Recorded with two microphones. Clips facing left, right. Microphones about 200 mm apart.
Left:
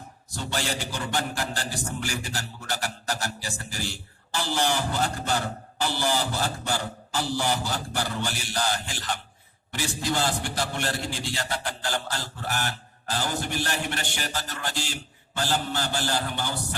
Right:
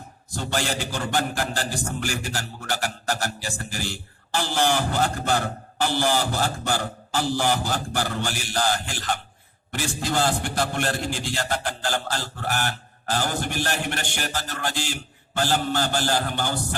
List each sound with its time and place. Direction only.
0.3 s speech: 45° right (ahead or behind)